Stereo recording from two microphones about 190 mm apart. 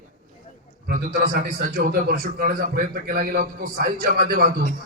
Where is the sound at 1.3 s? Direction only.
45° right (ahead or behind).